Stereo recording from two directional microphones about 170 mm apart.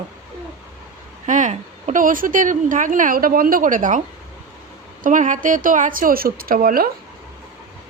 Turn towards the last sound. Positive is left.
turn(degrees=-60)  # may be behind; listen again after turning